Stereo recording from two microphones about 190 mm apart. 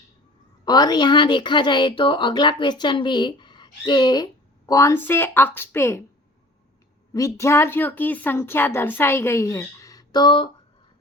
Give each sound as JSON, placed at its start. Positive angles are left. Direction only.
{"t": 0.6, "sound": "a woman's voice", "side_deg": 20}
{"t": 7.1, "sound": "a woman's voice", "side_deg": 15}